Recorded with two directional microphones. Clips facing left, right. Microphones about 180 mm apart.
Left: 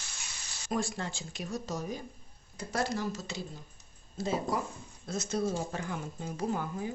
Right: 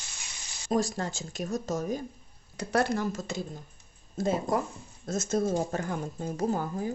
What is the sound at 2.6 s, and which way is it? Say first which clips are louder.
Speech: right 5 dB; 65° right (ahead or behind).